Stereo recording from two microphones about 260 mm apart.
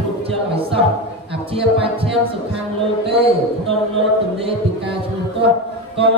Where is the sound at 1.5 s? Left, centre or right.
Right.